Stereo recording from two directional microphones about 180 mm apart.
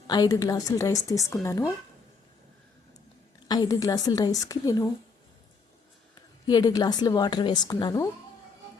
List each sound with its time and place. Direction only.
0.1 s a woman's voice: 20° left (ahead or behind)
3.5 s a woman's voice: 20° left (ahead or behind)
6.5 s a woman's voice: 20° left (ahead or behind)